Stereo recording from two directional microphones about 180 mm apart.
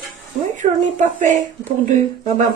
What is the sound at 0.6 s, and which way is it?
Speech, 45° right (ahead or behind).